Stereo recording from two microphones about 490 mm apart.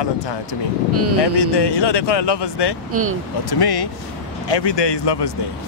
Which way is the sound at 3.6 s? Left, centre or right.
Left.